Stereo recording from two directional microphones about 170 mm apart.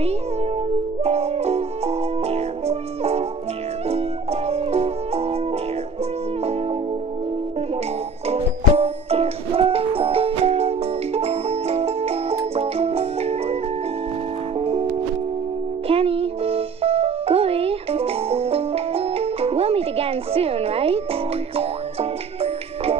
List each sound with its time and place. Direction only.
1.0 s music: 40° right (ahead or behind)
8.3 s music: 35° right (ahead or behind)
12.5 s organ: 35° right (ahead or behind)
14.6 s music: 35° right (ahead or behind)
15.9 s music: 35° right (ahead or behind)